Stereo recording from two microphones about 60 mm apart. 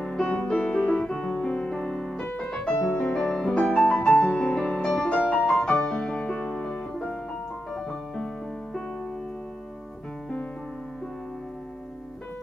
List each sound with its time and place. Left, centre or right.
0.0 s music: centre
4.8 s music: centre